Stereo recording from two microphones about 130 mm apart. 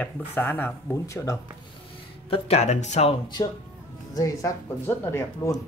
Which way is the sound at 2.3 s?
55° left (ahead or behind).